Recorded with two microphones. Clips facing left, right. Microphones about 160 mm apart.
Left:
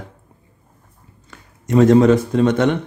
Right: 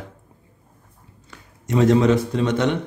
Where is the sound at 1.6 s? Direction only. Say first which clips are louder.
Left 5 dB; 50° left (ahead or behind).